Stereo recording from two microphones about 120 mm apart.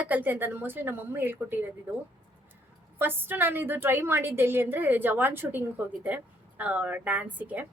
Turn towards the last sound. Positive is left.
turn(degrees=-15)  # may be behind; listen again after turning